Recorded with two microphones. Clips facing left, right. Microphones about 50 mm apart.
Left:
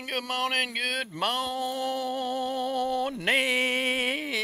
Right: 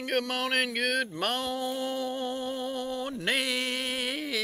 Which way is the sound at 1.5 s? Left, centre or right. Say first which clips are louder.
Left 2 dB; left.